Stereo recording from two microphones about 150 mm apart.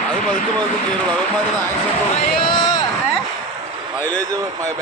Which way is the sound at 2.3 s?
30° left (ahead or behind).